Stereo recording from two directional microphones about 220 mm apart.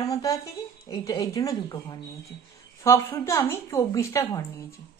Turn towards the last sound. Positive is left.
turn(degrees=15)  # may be behind; listen again after turning